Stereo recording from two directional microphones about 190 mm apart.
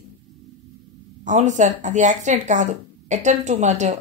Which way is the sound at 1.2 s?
40° right (ahead or behind).